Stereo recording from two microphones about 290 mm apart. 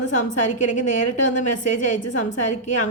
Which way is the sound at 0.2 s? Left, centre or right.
Left.